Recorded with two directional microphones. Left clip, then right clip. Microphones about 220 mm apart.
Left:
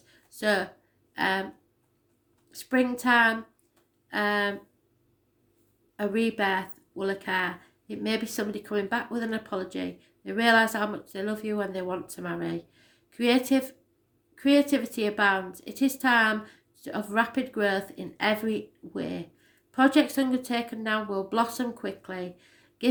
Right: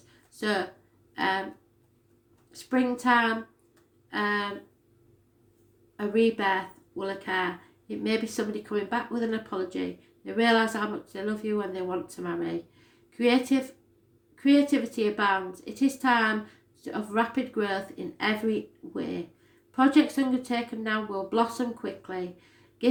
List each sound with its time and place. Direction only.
0.3 s speech: 40° left (ahead or behind)
2.5 s speech: 40° left (ahead or behind)
6.0 s speech: 40° left (ahead or behind)